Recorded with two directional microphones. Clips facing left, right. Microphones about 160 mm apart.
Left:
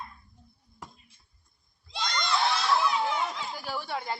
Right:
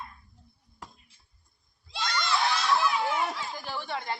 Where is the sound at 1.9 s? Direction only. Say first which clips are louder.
Even; 5° right (ahead or behind).